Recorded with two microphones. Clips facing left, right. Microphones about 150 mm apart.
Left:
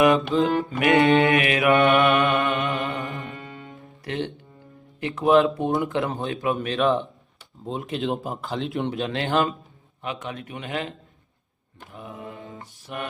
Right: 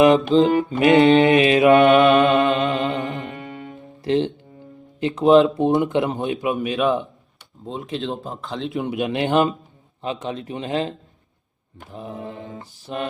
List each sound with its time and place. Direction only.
0.0 s speech: 25° right (ahead or behind)
0.7 s mantra: 25° right (ahead or behind)
3.8 s music: 25° right (ahead or behind)
4.9 s speech: 20° right (ahead or behind)
6.6 s speech: 5° right (ahead or behind)
8.9 s speech: 15° right (ahead or behind)